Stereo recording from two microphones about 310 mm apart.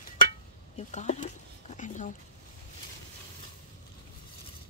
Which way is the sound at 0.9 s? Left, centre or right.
Left.